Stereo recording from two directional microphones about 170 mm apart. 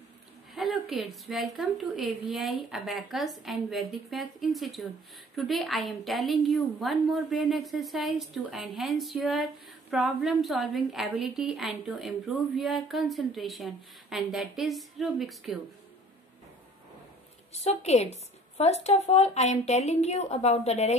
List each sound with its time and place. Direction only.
0.6 s a woman's voice: centre (ahead or behind)
17.6 s speech: 40° left (ahead or behind)